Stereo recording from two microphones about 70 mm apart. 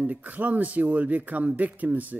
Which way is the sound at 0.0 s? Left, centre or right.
Right.